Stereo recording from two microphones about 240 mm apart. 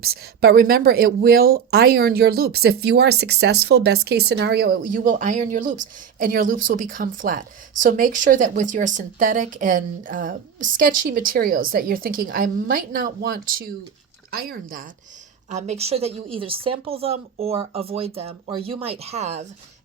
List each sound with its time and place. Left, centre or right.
0.0 s speech: right